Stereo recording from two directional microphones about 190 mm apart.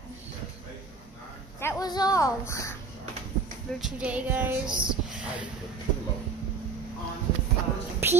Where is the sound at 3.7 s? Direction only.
5° right (ahead or behind).